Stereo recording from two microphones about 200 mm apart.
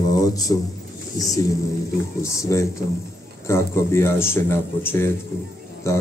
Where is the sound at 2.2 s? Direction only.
15° left (ahead or behind).